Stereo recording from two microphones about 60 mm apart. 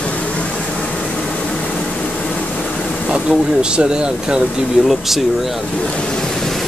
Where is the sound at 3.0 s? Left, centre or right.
Centre.